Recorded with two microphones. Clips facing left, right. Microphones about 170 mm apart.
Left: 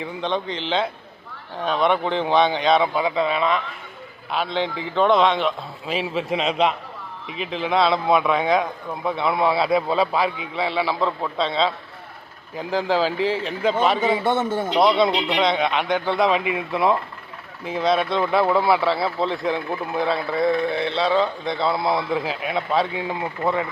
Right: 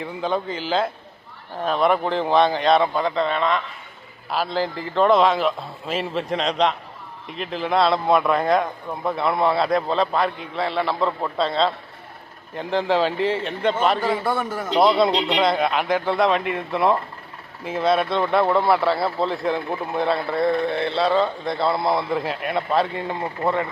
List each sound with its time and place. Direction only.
0.0 s speech: centre (ahead or behind)
14.3 s a man's voice: 25° left (ahead or behind)
14.8 s speech: centre (ahead or behind)